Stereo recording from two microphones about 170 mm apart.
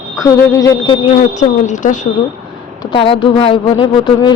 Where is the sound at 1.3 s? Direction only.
45° left (ahead or behind).